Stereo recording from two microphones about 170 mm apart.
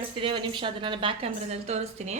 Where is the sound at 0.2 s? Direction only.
30° right (ahead or behind).